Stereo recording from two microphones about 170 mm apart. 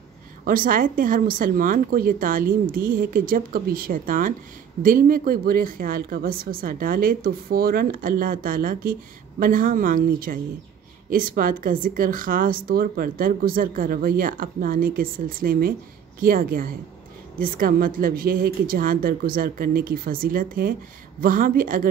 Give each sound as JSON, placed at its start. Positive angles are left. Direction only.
{"t": 0.5, "sound": "speech", "side_deg": -55}